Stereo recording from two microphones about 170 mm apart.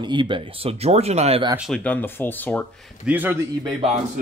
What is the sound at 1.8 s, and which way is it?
Speech, 10° left (ahead or behind).